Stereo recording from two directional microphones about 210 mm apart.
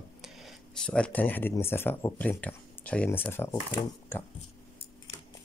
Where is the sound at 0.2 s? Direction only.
Centre (ahead or behind).